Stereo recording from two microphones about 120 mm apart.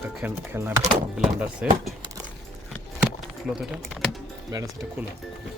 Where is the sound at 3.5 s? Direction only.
5° right (ahead or behind).